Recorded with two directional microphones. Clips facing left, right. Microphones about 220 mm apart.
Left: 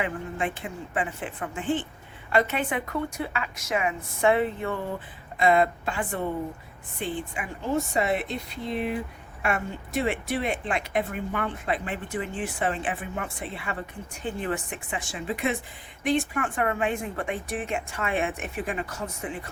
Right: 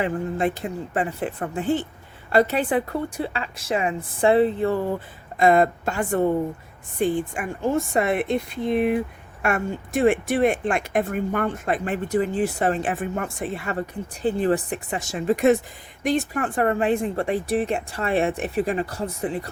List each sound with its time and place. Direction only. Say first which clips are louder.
0.0 s speech: right 6 dB; 40° right (ahead or behind)
5.4 s speech: right 4 dB; 45° right (ahead or behind)
14.2 s speech: right 9 dB; 35° right (ahead or behind)